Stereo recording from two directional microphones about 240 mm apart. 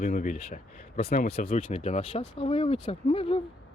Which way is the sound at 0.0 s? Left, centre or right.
Left.